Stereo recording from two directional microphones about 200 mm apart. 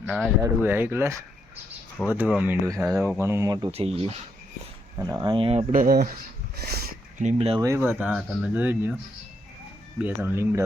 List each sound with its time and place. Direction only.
0.0 s speech: centre (ahead or behind); by 3.7 s 20° right (ahead or behind)
3.7 s speech: 30° right (ahead or behind)
4.9 s speech: 15° right (ahead or behind)
5.7 s speech: 45° right (ahead or behind)
6.6 s a sound: 50° right (ahead or behind)
7.2 s speech: 35° right (ahead or behind)
7.6 s speech: 15° right (ahead or behind)
10.0 s speech: 10° right (ahead or behind)